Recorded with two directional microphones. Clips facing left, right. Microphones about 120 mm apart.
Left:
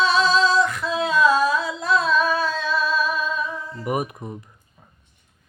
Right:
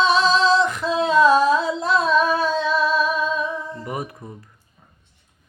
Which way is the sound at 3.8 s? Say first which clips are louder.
Left 4 dB; 20° left (ahead or behind).